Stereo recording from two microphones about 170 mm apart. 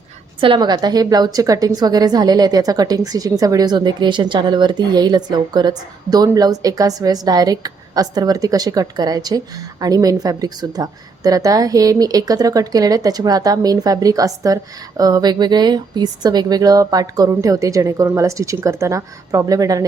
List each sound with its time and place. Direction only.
0.3 s a woman's voice: 30° right (ahead or behind)